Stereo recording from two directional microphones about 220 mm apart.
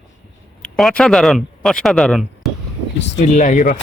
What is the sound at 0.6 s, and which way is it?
Speech, centre (ahead or behind).